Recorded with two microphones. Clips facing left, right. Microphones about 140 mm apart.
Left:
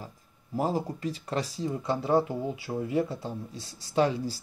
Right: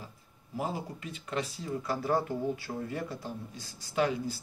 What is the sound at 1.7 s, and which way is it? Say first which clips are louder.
Speech: left 4 dB; 20° left (ahead or behind).